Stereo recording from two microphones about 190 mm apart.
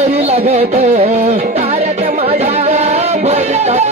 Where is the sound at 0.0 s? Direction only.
35° right (ahead or behind).